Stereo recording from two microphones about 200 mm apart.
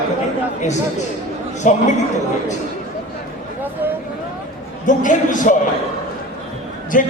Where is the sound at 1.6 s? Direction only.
35° left (ahead or behind).